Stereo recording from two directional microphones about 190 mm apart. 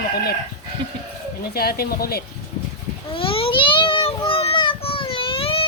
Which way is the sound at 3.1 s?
30° left (ahead or behind).